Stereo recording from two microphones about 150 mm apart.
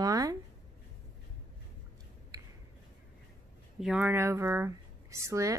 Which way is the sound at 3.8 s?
10° right (ahead or behind).